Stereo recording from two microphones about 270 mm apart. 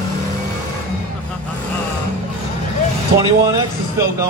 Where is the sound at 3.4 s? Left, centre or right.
Centre.